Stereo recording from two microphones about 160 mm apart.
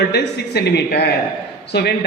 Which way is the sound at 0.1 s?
85° left.